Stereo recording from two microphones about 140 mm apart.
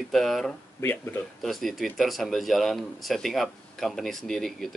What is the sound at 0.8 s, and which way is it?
Speech, 15° left (ahead or behind).